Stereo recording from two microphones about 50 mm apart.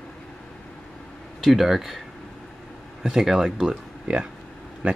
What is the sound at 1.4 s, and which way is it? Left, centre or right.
Speech, centre.